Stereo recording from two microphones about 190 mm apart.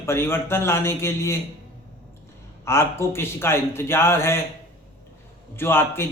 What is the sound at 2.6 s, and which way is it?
A man's voice, 15° left (ahead or behind).